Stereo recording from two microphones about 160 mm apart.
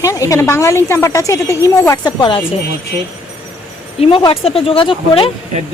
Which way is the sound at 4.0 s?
35° left (ahead or behind).